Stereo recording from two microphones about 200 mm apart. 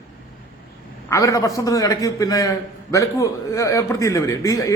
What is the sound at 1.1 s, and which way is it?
A man's voice, 15° left (ahead or behind).